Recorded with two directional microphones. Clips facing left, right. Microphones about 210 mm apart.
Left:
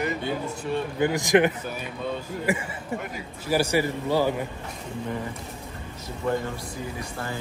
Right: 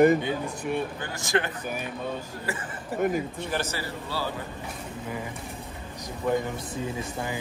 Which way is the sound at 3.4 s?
10° left (ahead or behind).